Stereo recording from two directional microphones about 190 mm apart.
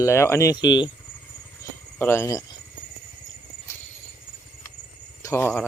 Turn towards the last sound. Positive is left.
turn(degrees=10)  # may be behind; listen again after turning